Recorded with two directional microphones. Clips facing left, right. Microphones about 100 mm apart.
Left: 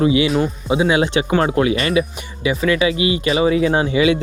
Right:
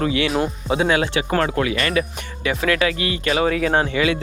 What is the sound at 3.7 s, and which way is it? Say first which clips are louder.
Speech: left 3 dB; 50° right (ahead or behind).